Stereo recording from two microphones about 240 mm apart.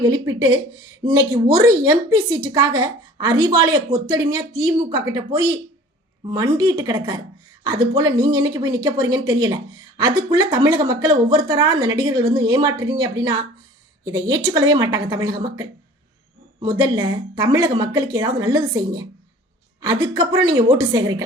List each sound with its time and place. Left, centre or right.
0.0 s a woman's voice: centre